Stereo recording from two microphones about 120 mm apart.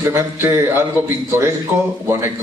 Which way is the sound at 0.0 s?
20° right (ahead or behind).